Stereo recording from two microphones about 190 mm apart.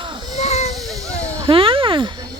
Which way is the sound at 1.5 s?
30° right (ahead or behind).